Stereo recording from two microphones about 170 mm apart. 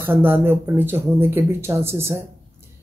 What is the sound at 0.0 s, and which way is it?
Speech, 10° right (ahead or behind).